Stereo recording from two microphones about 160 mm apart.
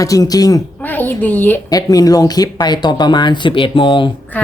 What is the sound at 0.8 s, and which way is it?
Speech, 10° left (ahead or behind).